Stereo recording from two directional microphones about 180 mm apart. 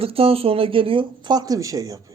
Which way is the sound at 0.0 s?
30° right (ahead or behind).